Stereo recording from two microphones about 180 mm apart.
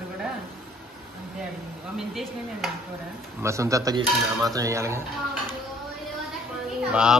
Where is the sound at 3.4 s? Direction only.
15° right (ahead or behind).